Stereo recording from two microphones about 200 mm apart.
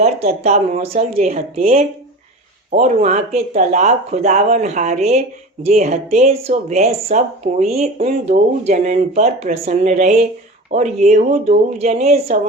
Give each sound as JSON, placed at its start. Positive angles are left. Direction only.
{"t": 0.0, "sound": "speech", "side_deg": -35}